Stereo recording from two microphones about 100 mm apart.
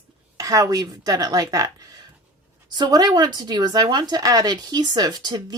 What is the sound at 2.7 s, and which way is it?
Speech, 40° right (ahead or behind).